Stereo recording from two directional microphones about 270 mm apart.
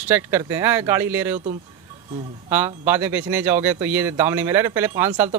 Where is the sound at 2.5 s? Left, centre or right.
Centre.